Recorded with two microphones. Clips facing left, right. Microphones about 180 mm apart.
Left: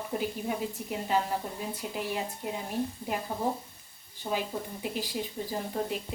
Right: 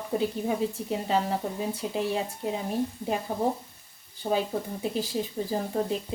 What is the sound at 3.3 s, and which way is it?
Speech, 45° right (ahead or behind).